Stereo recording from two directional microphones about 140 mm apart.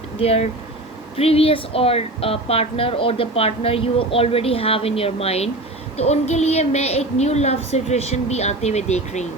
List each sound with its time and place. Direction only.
0.2 s a woman's voice: 50° left (ahead or behind)